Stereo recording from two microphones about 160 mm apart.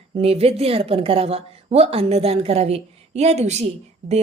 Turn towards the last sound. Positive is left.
turn(degrees=-40)  # may be behind; listen again after turning